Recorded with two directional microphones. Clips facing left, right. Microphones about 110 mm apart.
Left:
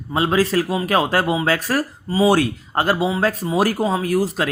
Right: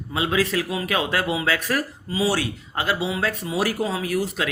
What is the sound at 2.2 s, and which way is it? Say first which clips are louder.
Speech: left 7 dB; 50° left (ahead or behind).